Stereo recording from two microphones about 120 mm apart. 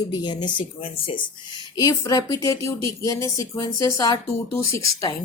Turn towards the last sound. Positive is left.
turn(degrees=30)  # may be behind; listen again after turning